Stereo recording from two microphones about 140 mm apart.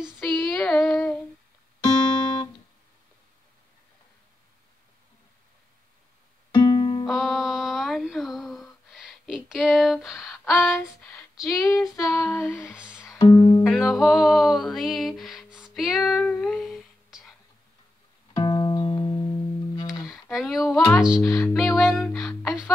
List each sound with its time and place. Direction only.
0.3 s child singing: centre (ahead or behind)
1.8 s music: 30° left (ahead or behind)
6.5 s music: 30° left (ahead or behind)
7.1 s a sound: centre (ahead or behind)
11.3 s child singing: 25° left (ahead or behind)
12.7 s music: 10° right (ahead or behind)
13.2 s music: 40° left (ahead or behind)
13.7 s music: centre (ahead or behind)
16.0 s female singing: 5° left (ahead or behind)
18.3 s music: 30° left (ahead or behind)
19.9 s a sound: centre (ahead or behind)
21.2 s a sound: 10° left (ahead or behind)
21.7 s music: 5° left (ahead or behind)